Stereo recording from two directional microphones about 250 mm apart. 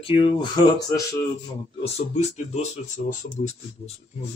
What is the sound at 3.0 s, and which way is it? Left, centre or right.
Speech, left.